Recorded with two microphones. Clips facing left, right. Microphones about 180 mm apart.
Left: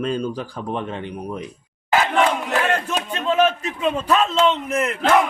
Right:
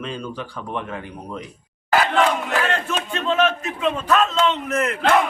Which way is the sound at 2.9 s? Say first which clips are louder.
Left 1 dB; 40° left (ahead or behind).